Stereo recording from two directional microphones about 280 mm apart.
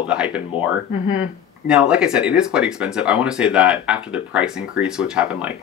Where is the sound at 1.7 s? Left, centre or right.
Centre.